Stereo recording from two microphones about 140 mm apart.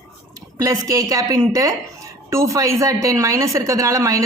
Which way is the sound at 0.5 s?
25° right (ahead or behind).